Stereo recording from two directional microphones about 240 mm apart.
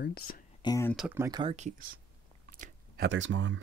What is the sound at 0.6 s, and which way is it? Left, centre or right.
Speech, centre.